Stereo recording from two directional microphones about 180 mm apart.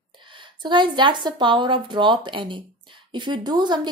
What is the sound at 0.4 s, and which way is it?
A woman's voice, 25° right (ahead or behind).